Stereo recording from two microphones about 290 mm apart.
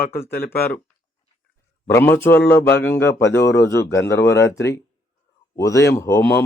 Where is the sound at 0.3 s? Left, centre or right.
Left.